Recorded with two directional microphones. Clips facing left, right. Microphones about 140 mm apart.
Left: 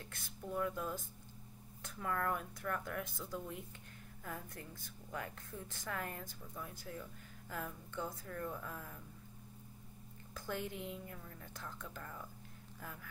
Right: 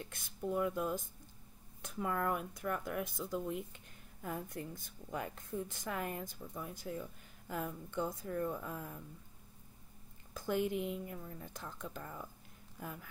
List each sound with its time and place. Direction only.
0.1 s a woman's voice: 15° right (ahead or behind)
10.3 s a woman's voice: 15° right (ahead or behind)